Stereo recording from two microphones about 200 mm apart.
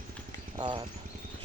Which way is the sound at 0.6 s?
20° right (ahead or behind).